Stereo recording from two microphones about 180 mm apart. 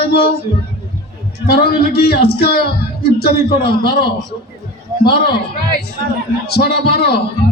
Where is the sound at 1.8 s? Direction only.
60° left (ahead or behind).